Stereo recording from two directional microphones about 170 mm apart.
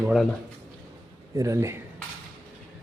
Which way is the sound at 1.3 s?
20° right (ahead or behind).